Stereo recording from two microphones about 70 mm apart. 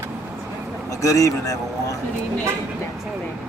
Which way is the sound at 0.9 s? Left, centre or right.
Left.